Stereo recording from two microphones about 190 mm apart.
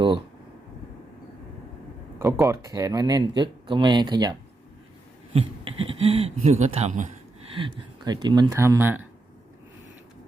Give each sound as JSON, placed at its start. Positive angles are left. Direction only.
{"t": 2.1, "sound": "speech", "side_deg": -15}
{"t": 7.5, "sound": "speech", "side_deg": -25}